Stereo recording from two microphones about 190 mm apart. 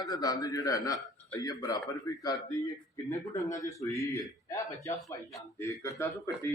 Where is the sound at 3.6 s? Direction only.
15° left (ahead or behind).